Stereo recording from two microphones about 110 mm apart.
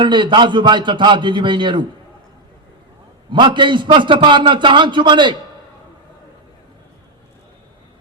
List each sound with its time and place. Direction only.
0.0 s a man's voice: 45° right (ahead or behind)
3.3 s a man's voice: 45° right (ahead or behind)